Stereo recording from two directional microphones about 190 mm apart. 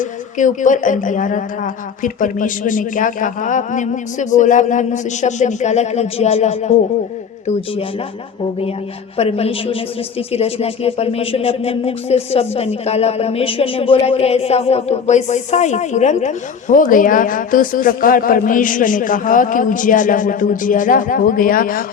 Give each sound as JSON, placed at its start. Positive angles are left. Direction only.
{"t": 0.0, "sound": "speech", "side_deg": 40}
{"t": 9.1, "sound": "speech", "side_deg": 30}